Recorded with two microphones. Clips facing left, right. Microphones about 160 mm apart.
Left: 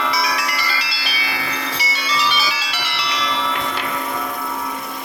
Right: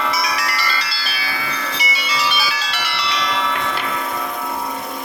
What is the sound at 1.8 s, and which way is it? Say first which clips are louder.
Music: left 1 dB; 10° right (ahead or behind).